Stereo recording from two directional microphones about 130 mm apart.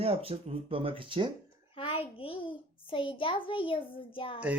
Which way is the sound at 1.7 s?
45° left (ahead or behind).